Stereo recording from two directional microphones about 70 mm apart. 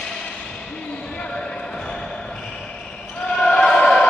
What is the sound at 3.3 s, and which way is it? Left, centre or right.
Basketball bounce, centre.